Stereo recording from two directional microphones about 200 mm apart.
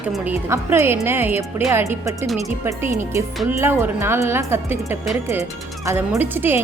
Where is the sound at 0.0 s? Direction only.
5° right (ahead or behind).